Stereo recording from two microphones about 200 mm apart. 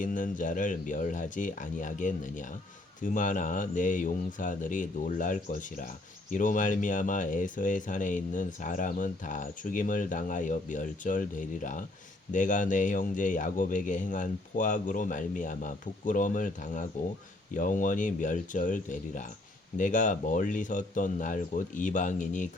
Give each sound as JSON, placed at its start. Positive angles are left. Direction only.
{"t": 0.0, "sound": "speech", "side_deg": 40}